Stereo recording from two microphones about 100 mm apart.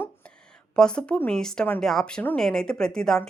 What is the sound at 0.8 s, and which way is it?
A woman's voice, 10° left (ahead or behind).